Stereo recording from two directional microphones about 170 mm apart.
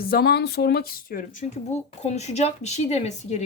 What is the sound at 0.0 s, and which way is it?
Speech, 65° left (ahead or behind).